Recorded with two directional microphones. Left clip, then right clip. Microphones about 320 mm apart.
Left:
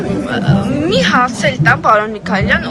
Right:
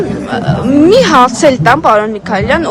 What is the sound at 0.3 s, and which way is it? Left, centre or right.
A woman's voice, centre.